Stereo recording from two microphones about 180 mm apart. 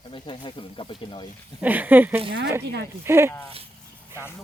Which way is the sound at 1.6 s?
10° right (ahead or behind).